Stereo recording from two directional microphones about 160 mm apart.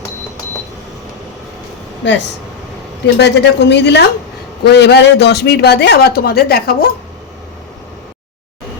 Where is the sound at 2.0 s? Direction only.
90° left; by 6.7 s 75° left (ahead or behind).